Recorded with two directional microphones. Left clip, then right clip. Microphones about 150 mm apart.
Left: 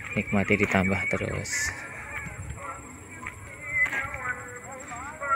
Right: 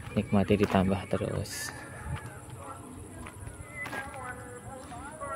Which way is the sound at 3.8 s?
Centre (ahead or behind).